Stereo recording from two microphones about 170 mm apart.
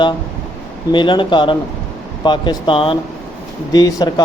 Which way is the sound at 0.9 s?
30° left (ahead or behind).